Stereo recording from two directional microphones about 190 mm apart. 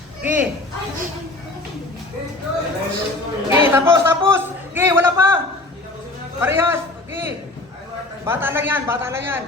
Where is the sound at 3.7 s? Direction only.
10° right (ahead or behind).